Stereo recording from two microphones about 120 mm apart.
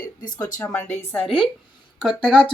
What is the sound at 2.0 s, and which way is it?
Speech, 5° right (ahead or behind).